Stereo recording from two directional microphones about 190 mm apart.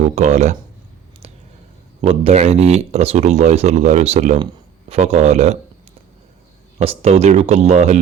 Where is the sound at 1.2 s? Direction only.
30° right (ahead or behind).